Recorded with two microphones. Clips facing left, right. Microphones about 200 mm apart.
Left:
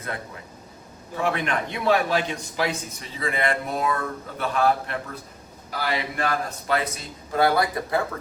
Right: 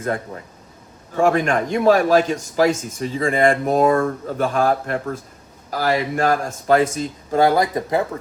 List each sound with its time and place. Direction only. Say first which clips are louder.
1.1 s a man's voice: right 8 dB; 45° right (ahead or behind)
7.4 s speech: right 4 dB; 15° right (ahead or behind)